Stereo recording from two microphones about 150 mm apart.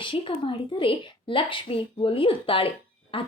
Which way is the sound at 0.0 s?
35° left (ahead or behind).